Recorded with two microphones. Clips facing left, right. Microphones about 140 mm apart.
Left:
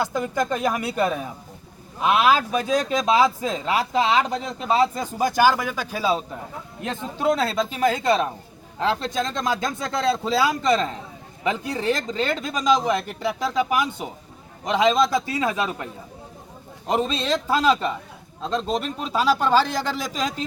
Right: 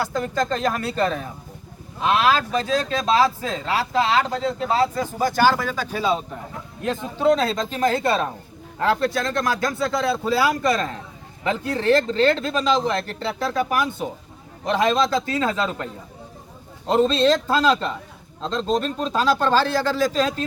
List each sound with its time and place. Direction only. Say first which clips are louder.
0.0 s speech: even; 15° left (ahead or behind)
7.2 s speech: right 2 dB; 5° left (ahead or behind)